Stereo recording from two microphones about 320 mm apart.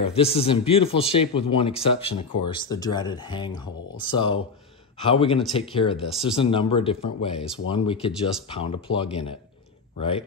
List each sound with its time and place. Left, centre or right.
0.0 s speech: centre